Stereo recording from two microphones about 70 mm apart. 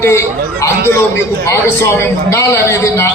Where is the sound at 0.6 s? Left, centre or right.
Left.